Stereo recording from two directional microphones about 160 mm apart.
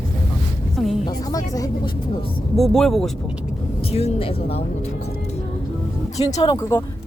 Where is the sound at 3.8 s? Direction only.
40° left (ahead or behind).